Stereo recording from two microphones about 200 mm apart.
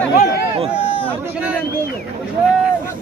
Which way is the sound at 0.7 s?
30° left (ahead or behind).